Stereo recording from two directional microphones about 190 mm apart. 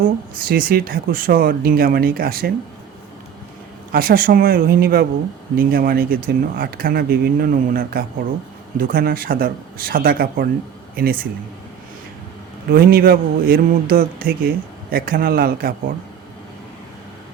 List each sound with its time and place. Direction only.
0.0 s speech: 50° right (ahead or behind)
3.9 s speech: 50° right (ahead or behind)
12.7 s speech: 55° right (ahead or behind)